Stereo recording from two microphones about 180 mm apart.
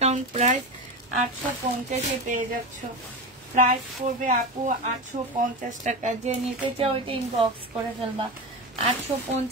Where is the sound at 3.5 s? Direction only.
45° right (ahead or behind).